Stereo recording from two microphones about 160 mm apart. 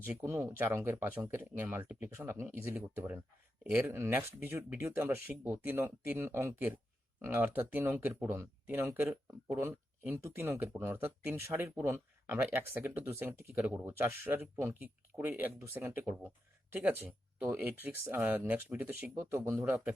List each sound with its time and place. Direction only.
0.0 s speech: 15° right (ahead or behind)